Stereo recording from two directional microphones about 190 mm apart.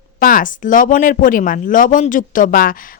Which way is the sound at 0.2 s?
45° left (ahead or behind).